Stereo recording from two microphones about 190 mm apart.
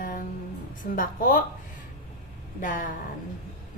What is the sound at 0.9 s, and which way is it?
Speech, 45° left (ahead or behind).